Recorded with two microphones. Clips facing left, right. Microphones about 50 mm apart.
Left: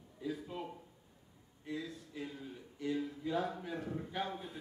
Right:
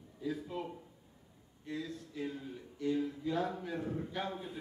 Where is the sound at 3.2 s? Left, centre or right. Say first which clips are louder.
Left 1 dB; centre.